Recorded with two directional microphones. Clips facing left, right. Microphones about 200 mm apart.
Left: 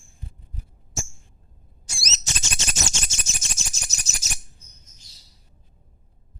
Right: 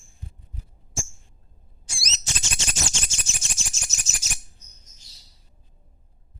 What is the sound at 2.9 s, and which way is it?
Bird, 40° left (ahead or behind).